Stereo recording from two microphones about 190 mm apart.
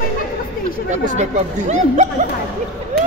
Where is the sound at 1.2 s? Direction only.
35° right (ahead or behind).